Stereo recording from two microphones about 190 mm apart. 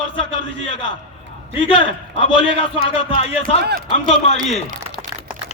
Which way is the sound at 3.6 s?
60° right (ahead or behind).